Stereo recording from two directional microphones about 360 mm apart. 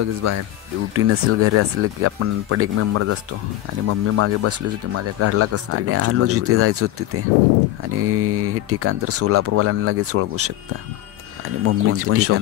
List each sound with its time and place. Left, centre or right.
0.0 s speech: right
8.0 s speech: right
11.6 s speech: right